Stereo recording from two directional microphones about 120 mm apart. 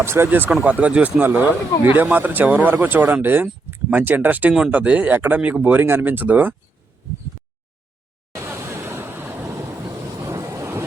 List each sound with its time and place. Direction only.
0.0 s speech: 20° right (ahead or behind)
8.4 s vehicle: 20° right (ahead or behind)